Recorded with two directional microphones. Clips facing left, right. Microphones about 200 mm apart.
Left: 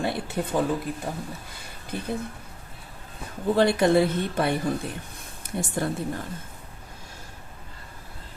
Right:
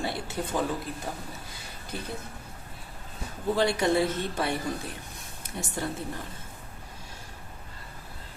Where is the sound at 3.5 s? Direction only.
55° left (ahead or behind).